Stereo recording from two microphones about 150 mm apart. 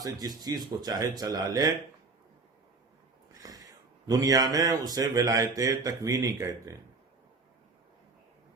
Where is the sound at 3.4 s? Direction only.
25° right (ahead or behind).